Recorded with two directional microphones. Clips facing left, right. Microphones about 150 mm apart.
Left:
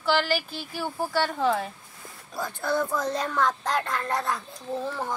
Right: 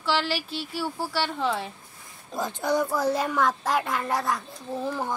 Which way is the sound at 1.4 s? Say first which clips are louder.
Left 3 dB; centre (ahead or behind).